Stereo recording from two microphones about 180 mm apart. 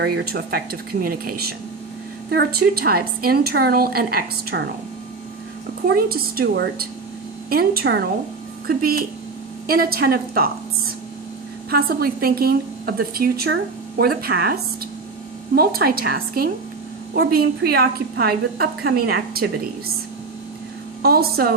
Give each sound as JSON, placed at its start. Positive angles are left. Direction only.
{"t": 0.0, "sound": "a woman's voice", "side_deg": -60}
{"t": 2.3, "sound": "a woman's voice", "side_deg": -60}
{"t": 5.9, "sound": "a woman's voice", "side_deg": -55}
{"t": 11.7, "sound": "a woman's voice", "side_deg": -60}
{"t": 15.5, "sound": "a woman's voice", "side_deg": -55}
{"t": 21.0, "sound": "a woman's voice", "side_deg": -60}